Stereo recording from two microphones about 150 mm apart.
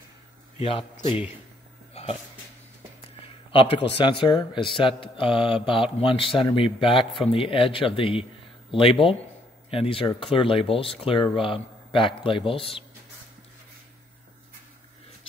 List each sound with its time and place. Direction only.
0.6 s a man's voice: 40° left (ahead or behind)
3.2 s a man's voice: 35° left (ahead or behind)